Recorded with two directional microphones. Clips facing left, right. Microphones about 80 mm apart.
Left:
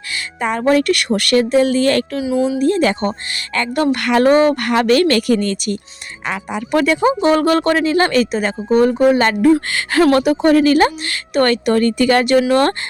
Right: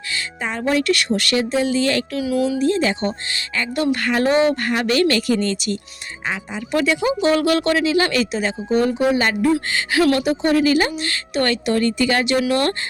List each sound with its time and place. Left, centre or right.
0.4 s speech: left
2.1 s speech: left
2.6 s speech: left
4.3 s speech: left
6.2 s speech: left
7.0 s speech: left
10.0 s speech: left
10.2 s speech: left
12.4 s speech: left